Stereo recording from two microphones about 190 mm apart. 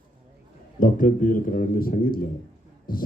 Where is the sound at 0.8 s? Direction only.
45° left (ahead or behind).